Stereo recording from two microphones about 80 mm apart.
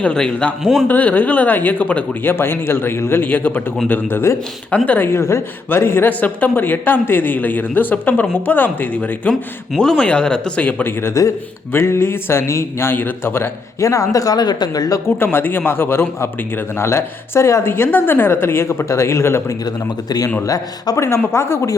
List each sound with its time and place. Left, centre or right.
0.0 s speech: centre
0.6 s a man's voice: centre
0.9 s a man's voice: centre
2.3 s a man's voice: left
9.3 s speech: centre
11.0 s a man's voice: left
15.2 s a man's voice: left
19.6 s speech: left
20.4 s a man's voice: left